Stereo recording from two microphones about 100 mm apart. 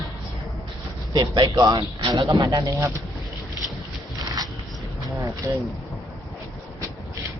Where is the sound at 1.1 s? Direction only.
45° right (ahead or behind).